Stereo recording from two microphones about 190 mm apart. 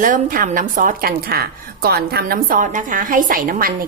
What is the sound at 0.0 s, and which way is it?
A woman's voice, 45° right (ahead or behind).